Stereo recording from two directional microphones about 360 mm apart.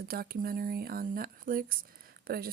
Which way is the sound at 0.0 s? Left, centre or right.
Right.